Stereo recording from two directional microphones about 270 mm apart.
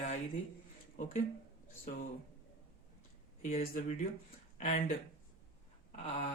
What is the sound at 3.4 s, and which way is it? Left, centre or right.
Speech, left.